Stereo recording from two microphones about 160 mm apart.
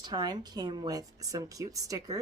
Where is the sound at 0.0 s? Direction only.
25° right (ahead or behind).